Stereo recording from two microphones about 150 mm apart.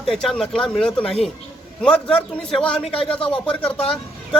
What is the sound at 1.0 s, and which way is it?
Speech, 40° left (ahead or behind).